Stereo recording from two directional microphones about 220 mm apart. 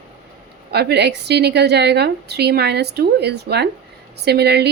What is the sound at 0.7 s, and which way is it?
A woman's voice, 50° right (ahead or behind).